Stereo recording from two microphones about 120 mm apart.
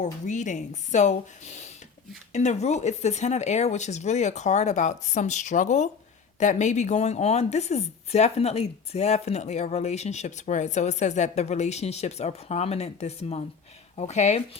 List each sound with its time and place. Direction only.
0.0 s a woman's voice: 90° left; by 14.4 s 70° left (ahead or behind)